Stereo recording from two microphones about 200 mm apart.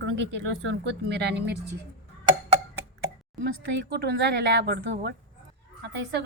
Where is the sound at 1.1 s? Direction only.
60° right (ahead or behind).